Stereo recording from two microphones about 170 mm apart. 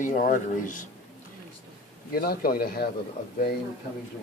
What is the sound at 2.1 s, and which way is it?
Speech, 60° left (ahead or behind).